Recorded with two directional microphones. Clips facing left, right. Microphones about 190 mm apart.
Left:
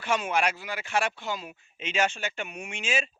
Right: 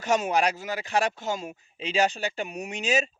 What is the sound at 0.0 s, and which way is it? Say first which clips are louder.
A man's voice: right 3 dB; 40° right (ahead or behind).